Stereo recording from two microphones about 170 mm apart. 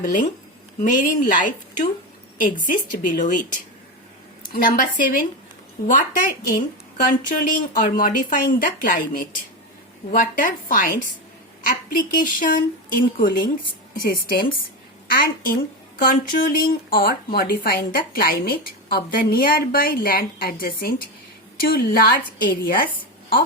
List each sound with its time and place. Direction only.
0.0 s a woman's voice: 50° left (ahead or behind)